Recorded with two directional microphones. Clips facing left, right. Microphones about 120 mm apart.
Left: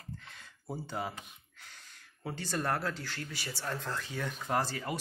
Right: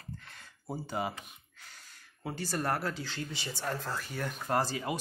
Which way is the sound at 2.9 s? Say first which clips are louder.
Right 2 dB; 15° right (ahead or behind).